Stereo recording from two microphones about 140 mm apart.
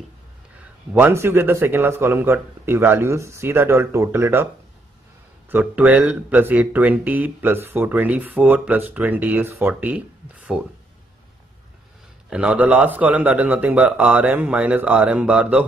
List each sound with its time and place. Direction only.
0.9 s speech: 15° right (ahead or behind)
5.5 s speech: 10° right (ahead or behind)
12.3 s speech: 10° right (ahead or behind)